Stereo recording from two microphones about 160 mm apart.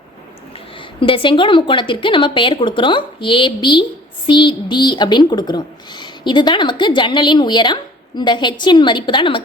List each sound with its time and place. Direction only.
0.9 s a woman's voice: 30° left (ahead or behind)